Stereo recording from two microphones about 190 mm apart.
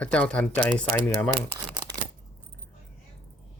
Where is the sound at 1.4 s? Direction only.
20° right (ahead or behind).